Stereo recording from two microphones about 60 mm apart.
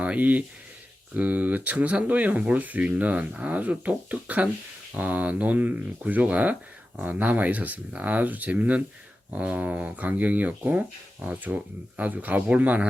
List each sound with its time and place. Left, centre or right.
0.0 s speech: right